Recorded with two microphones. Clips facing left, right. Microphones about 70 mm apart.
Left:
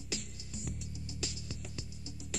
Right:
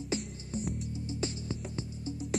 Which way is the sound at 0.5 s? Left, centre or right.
Right.